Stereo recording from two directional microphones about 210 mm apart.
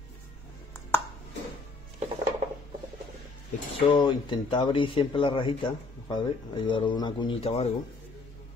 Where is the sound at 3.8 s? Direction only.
20° left (ahead or behind).